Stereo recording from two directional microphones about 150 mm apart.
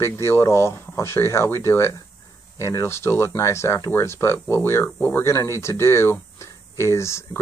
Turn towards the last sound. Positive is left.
turn(degrees=20)  # may be behind; listen again after turning